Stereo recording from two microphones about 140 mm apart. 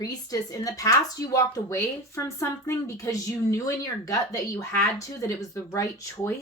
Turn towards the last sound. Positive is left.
turn(degrees=20)  # may be behind; listen again after turning